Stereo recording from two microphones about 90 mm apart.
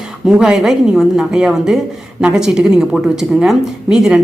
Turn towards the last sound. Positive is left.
turn(degrees=-5)  # may be behind; listen again after turning